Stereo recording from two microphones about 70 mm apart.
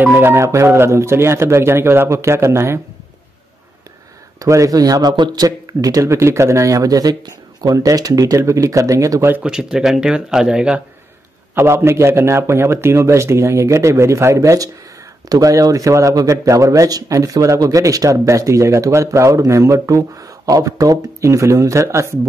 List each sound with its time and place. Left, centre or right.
0.2 s a man's voice: right
4.4 s speech: right
6.0 s speech: right
9.4 s speech: centre
11.5 s a man's voice: right